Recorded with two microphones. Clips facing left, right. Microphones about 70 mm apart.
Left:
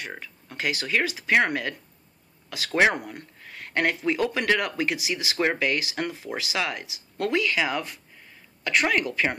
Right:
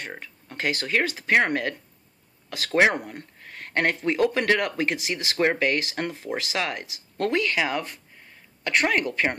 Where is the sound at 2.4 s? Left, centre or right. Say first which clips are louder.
Right 1 dB; right.